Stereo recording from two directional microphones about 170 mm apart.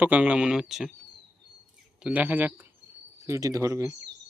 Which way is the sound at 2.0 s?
10° right (ahead or behind).